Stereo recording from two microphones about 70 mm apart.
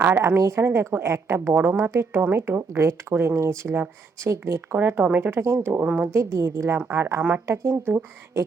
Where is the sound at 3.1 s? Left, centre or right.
Right.